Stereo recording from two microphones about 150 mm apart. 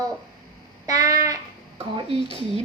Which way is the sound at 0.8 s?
25° right (ahead or behind).